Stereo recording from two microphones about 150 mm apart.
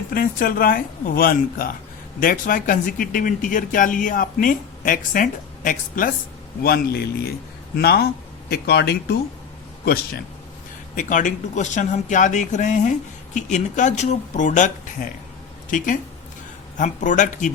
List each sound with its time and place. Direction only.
0.1 s speech: 70° left (ahead or behind)
6.6 s a man's voice: 90° left
10.9 s speech: 60° left (ahead or behind)
16.7 s speech: 55° left (ahead or behind)